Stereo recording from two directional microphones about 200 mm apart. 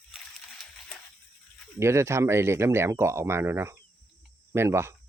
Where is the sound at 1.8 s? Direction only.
15° right (ahead or behind).